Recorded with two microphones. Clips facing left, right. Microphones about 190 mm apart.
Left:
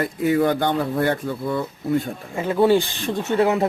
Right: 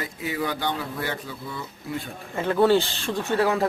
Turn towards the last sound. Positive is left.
turn(degrees=20)  # may be behind; listen again after turning